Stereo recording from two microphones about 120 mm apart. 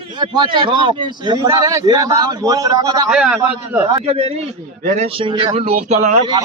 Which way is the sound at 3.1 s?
5° right (ahead or behind).